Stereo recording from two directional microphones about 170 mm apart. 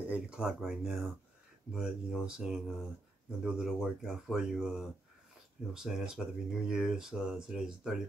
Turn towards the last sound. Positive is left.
turn(degrees=0)  # may be behind; listen again after turning